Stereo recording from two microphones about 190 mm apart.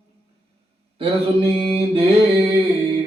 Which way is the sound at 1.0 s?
30° right (ahead or behind).